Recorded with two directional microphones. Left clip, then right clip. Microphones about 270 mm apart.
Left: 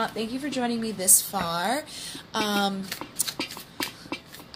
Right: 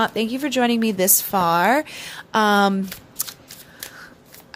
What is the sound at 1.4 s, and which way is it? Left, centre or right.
Speech, right.